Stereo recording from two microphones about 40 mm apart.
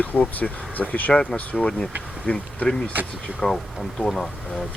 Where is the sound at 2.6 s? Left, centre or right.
Left.